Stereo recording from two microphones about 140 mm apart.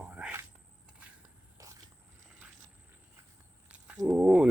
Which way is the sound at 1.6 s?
20° right (ahead or behind).